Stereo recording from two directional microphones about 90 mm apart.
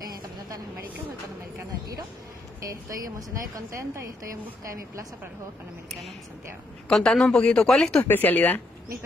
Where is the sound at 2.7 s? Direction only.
40° right (ahead or behind).